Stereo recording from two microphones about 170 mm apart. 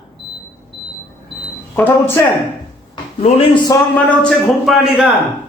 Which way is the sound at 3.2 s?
35° left (ahead or behind).